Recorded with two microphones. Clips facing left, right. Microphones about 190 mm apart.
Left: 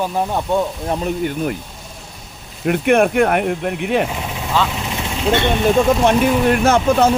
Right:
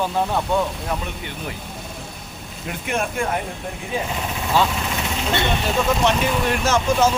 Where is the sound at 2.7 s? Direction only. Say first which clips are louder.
Left 12 dB; 60° left (ahead or behind).